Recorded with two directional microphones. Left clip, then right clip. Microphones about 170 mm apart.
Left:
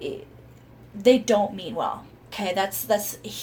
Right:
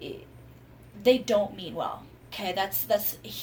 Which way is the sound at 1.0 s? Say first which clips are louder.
Left 4 dB; 50° left (ahead or behind).